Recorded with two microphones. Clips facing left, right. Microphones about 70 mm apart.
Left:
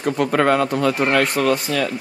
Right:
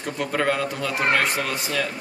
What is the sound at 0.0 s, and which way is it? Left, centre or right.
Speech, left.